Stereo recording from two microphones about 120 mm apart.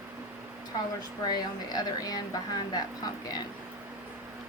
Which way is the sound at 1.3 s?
35° left (ahead or behind).